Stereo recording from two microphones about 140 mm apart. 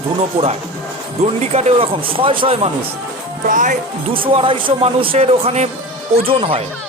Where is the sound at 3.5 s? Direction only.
70° right (ahead or behind).